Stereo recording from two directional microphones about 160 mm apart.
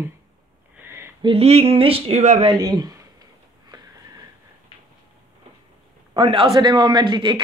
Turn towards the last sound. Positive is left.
turn(degrees=-30)  # may be behind; listen again after turning